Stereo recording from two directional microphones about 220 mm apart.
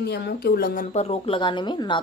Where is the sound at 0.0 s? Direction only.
45° left (ahead or behind).